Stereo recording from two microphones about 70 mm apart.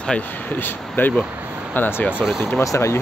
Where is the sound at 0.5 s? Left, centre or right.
Left.